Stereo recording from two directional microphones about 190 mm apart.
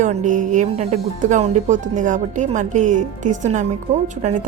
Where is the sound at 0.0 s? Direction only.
40° right (ahead or behind).